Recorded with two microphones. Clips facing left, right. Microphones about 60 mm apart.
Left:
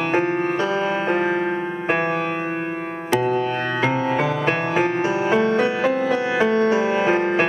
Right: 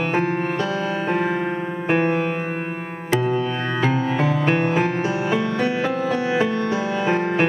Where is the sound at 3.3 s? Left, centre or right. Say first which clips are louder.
Left 1 dB; left.